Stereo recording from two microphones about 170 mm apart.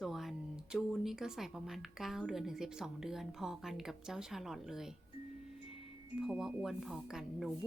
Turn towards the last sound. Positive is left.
turn(degrees=0)  # may be behind; listen again after turning